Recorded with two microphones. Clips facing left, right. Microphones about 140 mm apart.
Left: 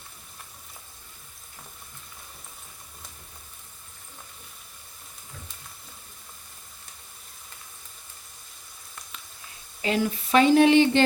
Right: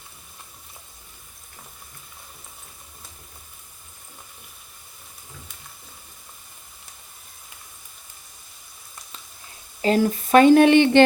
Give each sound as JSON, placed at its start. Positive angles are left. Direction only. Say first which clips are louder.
{"t": 9.8, "sound": "speech", "louder": "right 6 dB", "side_deg": -40}